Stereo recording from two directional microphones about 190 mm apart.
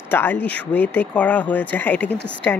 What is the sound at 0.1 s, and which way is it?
Speech, 10° left (ahead or behind).